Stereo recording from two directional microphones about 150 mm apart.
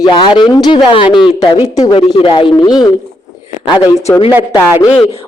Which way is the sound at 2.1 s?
35° left (ahead or behind).